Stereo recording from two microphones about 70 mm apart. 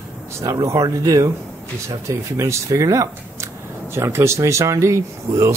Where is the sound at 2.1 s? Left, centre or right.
Right.